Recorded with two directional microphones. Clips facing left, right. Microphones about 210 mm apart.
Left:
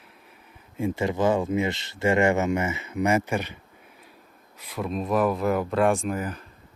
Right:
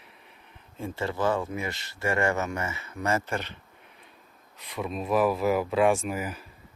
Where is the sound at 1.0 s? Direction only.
15° left (ahead or behind); by 6.5 s 5° right (ahead or behind).